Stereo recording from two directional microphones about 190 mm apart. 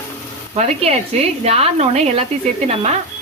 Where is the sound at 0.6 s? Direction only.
35° right (ahead or behind).